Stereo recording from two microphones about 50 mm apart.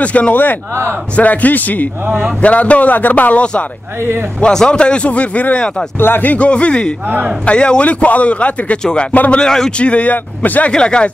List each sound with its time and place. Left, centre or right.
0.0 s a man's voice: left
4.4 s a man's voice: centre
5.9 s speech: left
6.3 s a man's voice: left
9.4 s a man's voice: centre
9.8 s a man's voice: left
10.7 s a man's voice: centre